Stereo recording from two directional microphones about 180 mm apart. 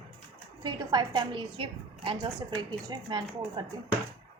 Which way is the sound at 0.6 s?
20° right (ahead or behind).